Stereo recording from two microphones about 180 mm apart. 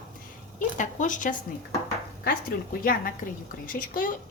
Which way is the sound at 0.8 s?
45° left (ahead or behind).